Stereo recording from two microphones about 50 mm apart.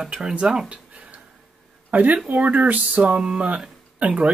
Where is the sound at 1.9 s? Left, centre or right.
Right.